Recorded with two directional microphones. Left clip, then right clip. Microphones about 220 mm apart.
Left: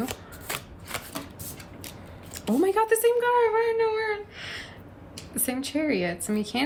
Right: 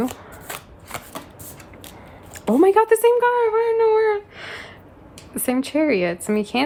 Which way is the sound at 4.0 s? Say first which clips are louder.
Right 9 dB; 25° right (ahead or behind).